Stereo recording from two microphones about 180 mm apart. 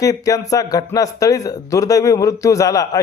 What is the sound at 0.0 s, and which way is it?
Speech, 20° left (ahead or behind).